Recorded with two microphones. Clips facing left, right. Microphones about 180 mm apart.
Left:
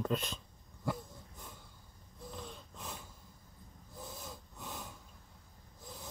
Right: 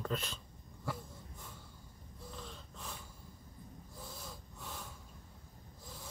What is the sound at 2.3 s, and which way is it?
Gasp, 15° left (ahead or behind).